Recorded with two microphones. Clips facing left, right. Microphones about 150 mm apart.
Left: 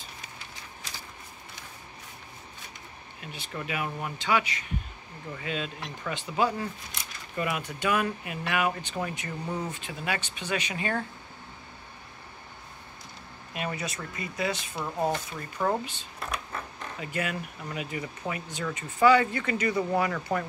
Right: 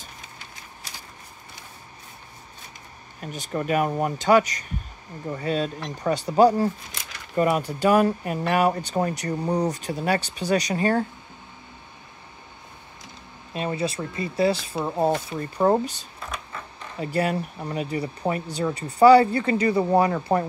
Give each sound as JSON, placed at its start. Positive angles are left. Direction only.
{"t": 3.2, "sound": "speech", "side_deg": -45}
{"t": 13.5, "sound": "speech", "side_deg": -30}